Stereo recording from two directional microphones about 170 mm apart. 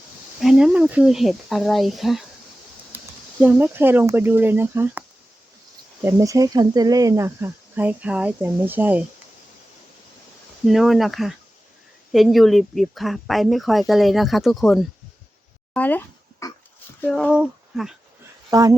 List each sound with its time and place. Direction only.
0.3 s speech: centre (ahead or behind)
2.9 s a sound: 10° right (ahead or behind)
3.4 s speech: 10° right (ahead or behind)
10.7 s speech: centre (ahead or behind)
15.7 s a sound: 10° left (ahead or behind)
17.0 s speech: 5° left (ahead or behind)